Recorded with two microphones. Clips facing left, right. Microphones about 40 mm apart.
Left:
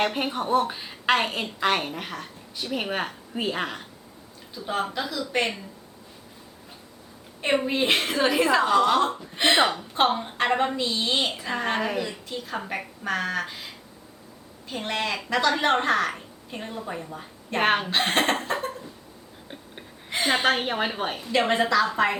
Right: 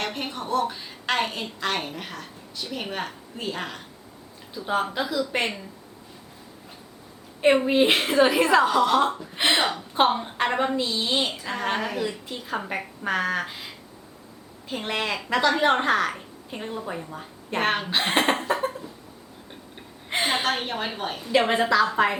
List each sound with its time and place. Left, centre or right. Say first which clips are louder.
0.0 s a woman's voice: left 5 dB; centre
3.3 s a woman's voice: left 4 dB; left
4.5 s a woman's voice: right 2 dB; centre
7.4 s a woman's voice: right 4 dB; centre
9.0 s a woman's voice: right 1 dB; centre
9.6 s a woman's voice: left 3 dB; centre
9.9 s a woman's voice: right 1 dB; centre
12.0 s a woman's voice: right 2 dB; centre
14.7 s a woman's voice: right 1 dB; centre
17.6 s a woman's voice: left 2 dB; centre
17.8 s a woman's voice: right 1 dB; centre
20.4 s a woman's voice: left 3 dB; centre
21.2 s a woman's voice: right 2 dB; centre